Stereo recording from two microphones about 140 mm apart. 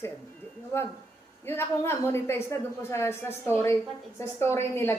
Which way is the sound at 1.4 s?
15° left (ahead or behind).